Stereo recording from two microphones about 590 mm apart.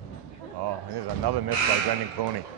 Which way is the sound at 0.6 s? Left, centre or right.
Right.